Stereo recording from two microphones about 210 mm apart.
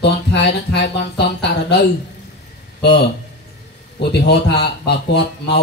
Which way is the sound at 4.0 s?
55° left (ahead or behind).